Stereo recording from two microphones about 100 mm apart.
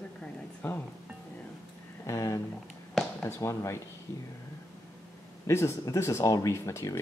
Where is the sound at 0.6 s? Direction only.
20° left (ahead or behind).